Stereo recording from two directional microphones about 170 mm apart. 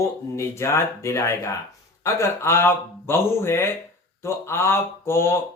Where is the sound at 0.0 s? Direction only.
15° left (ahead or behind).